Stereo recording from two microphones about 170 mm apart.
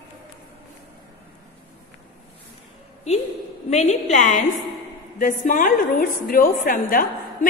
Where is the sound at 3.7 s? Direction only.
40° left (ahead or behind).